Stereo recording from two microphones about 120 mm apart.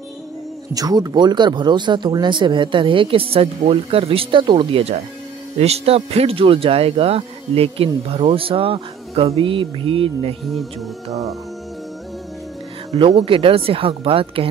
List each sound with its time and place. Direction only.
0.7 s speech: 35° right (ahead or behind)
11.1 s music: 30° right (ahead or behind)
12.9 s speech: 55° right (ahead or behind)